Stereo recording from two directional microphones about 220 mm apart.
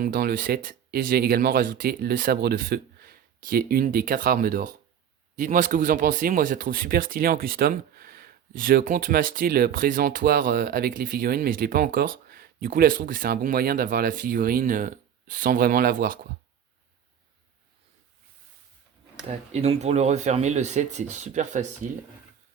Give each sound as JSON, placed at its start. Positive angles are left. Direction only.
{"t": 0.0, "sound": "speech", "side_deg": -45}
{"t": 19.5, "sound": "speech", "side_deg": -30}